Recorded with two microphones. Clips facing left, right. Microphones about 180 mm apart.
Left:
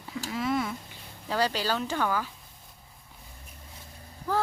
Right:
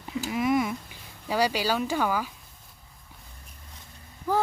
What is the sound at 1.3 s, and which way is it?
Speech, 10° right (ahead or behind).